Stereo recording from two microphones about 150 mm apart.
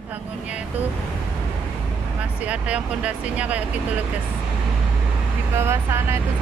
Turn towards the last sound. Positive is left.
turn(degrees=-15)  # may be behind; listen again after turning